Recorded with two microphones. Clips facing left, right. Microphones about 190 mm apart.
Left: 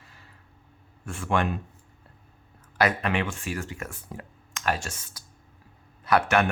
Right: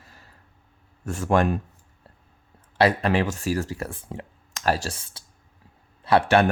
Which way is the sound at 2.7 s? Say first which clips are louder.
Right 4 dB; 30° right (ahead or behind).